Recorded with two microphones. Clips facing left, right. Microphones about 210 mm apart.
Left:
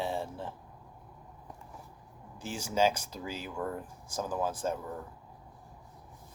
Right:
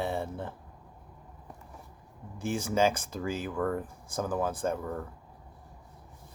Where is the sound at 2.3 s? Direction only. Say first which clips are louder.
Right 3 dB; 55° right (ahead or behind).